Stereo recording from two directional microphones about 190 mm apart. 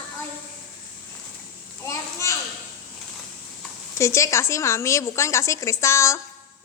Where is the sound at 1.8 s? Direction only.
15° left (ahead or behind).